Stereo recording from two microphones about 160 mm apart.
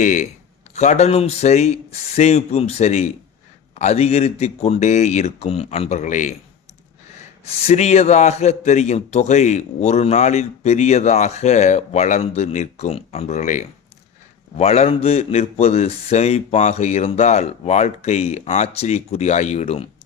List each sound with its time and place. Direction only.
0.0 s a man's voice: 50° left (ahead or behind)
7.4 s a man's voice: 45° left (ahead or behind)